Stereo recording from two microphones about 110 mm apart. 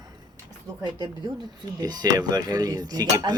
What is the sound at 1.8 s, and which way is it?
Speech, 35° right (ahead or behind).